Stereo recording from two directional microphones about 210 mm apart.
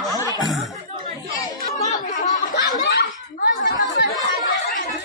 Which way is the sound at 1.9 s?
35° left (ahead or behind).